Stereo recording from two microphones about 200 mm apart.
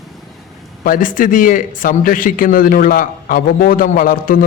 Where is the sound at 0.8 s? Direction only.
45° left (ahead or behind).